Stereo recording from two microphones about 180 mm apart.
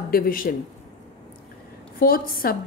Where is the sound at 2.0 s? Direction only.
55° left (ahead or behind).